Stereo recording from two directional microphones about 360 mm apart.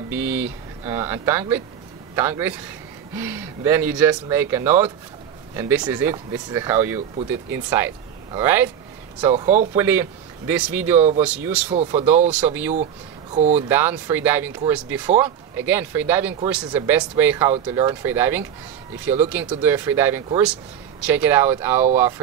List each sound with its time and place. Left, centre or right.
0.1 s speech: centre
9.8 s speech: centre
13.3 s speech: centre
13.7 s speech: centre